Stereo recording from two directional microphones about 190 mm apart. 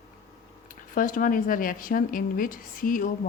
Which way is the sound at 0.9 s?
45° left (ahead or behind).